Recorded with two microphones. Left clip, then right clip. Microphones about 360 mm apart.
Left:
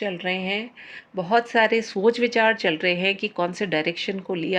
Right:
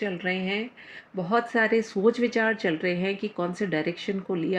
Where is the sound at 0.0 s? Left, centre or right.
Left.